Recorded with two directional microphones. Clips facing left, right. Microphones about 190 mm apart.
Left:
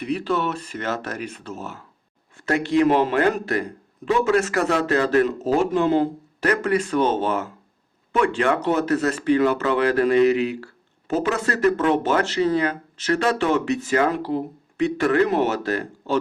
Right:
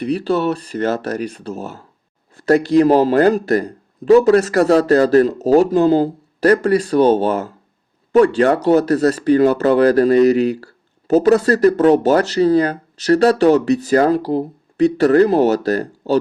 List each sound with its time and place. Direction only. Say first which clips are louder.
0.0 s speech: right 6 dB; 35° right (ahead or behind)